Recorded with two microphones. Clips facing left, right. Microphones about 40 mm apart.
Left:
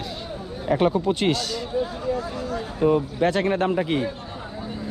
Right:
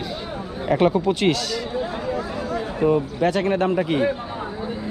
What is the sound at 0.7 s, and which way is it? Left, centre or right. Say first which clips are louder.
Speech: right 2 dB; right.